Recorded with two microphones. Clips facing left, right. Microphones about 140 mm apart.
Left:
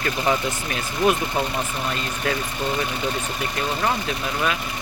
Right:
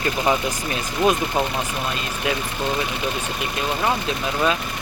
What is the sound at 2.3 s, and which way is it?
Speech, 15° right (ahead or behind).